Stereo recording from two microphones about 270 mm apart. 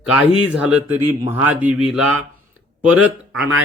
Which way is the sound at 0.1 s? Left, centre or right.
Centre.